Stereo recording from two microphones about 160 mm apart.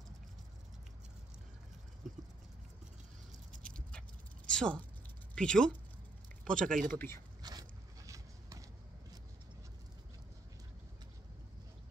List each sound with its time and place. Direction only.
3.6 s a sound: 5° left (ahead or behind)
4.5 s speech: 5° left (ahead or behind)
7.4 s zipper: 20° right (ahead or behind)